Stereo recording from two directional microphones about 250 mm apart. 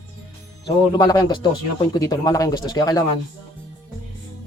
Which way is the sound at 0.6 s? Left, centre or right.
Centre.